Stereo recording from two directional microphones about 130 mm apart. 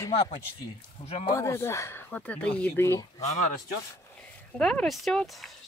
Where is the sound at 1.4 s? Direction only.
20° left (ahead or behind).